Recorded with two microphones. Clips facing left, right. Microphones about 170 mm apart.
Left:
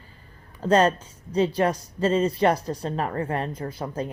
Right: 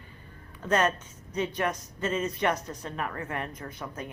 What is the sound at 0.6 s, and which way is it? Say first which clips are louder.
Speech: left 6 dB; 30° left (ahead or behind).